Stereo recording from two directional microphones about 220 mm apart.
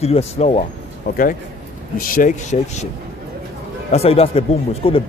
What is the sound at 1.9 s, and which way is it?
Speech, 40° left (ahead or behind).